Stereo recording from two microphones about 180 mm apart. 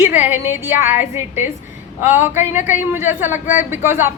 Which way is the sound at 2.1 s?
40° left (ahead or behind).